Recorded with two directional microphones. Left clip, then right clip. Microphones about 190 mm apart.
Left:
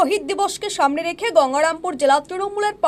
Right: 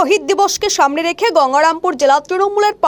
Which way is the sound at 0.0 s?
45° right (ahead or behind).